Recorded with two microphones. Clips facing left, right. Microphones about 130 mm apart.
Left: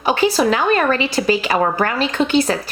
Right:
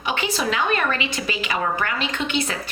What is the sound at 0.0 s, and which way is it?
A woman's voice, 40° left (ahead or behind).